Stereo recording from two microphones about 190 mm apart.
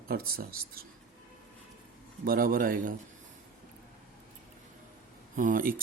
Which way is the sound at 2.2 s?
50° right (ahead or behind).